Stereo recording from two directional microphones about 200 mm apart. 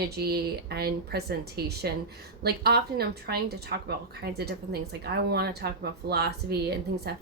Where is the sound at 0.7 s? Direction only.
50° right (ahead or behind).